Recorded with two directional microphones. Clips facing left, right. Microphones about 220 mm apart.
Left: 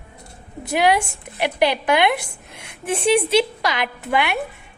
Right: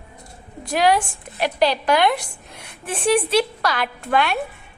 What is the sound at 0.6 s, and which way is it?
A woman's voice, 10° left (ahead or behind).